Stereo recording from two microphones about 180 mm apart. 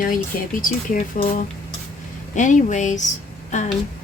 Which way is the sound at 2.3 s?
45° left (ahead or behind).